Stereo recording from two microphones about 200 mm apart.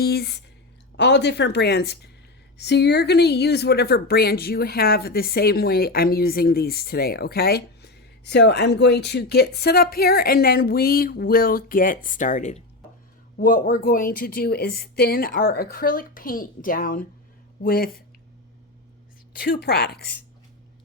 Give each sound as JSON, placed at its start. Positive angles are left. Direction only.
{"t": 0.0, "sound": "speech", "side_deg": 50}
{"t": 19.3, "sound": "speech", "side_deg": 45}